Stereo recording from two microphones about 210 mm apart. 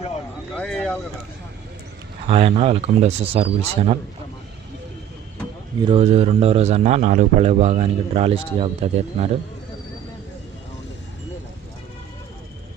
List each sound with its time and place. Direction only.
0.6 s a sound: 5° left (ahead or behind)
2.2 s a man's voice: 25° right (ahead or behind)
5.8 s a man's voice: 25° right (ahead or behind)